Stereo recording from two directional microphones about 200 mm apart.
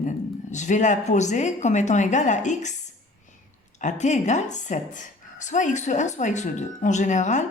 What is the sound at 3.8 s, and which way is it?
A woman's voice, 35° left (ahead or behind).